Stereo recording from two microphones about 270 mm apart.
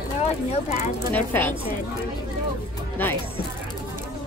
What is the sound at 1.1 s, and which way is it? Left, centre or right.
Speech, centre.